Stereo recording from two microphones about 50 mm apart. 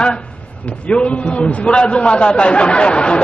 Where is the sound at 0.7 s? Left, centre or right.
Left.